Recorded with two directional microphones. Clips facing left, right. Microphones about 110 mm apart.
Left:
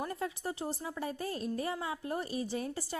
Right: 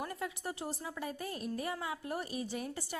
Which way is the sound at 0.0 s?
30° left (ahead or behind).